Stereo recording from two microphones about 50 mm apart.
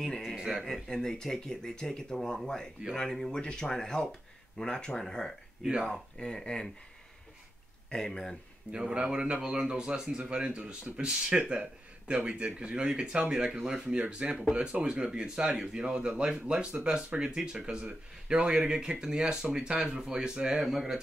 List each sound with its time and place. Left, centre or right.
0.4 s speech: centre
0.7 s speech: centre
5.6 s speech: centre
5.9 s speech: centre
7.9 s speech: centre
8.9 s speech: right
20.6 s speech: centre